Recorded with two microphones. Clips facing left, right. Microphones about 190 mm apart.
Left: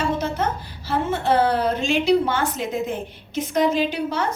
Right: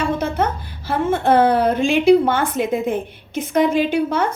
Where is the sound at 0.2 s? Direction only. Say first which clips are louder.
Right 3 dB; 55° right (ahead or behind).